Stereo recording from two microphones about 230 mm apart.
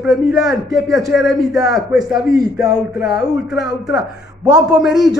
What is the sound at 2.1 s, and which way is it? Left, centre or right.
Speech, centre.